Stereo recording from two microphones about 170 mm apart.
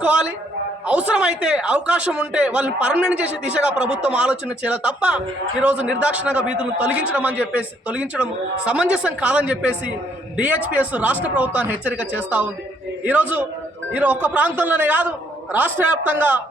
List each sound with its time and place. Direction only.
0.0 s speech: 5° right (ahead or behind)